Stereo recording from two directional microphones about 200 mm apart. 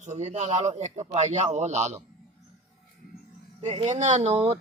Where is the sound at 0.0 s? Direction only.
35° right (ahead or behind).